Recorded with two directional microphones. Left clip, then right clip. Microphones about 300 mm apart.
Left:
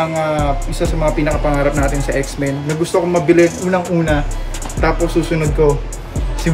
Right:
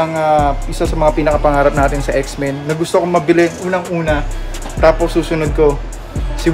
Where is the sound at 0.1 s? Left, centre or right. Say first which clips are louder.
Right 4 dB; centre.